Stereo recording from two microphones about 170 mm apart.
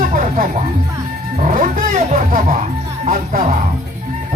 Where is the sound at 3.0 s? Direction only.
55° right (ahead or behind).